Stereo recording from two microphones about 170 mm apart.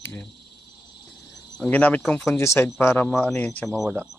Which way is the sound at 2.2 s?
15° left (ahead or behind).